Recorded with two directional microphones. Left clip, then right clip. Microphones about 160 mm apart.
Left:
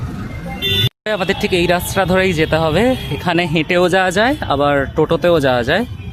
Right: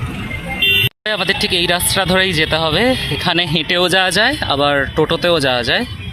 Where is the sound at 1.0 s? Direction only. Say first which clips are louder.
Right 1 dB; 15° left (ahead or behind).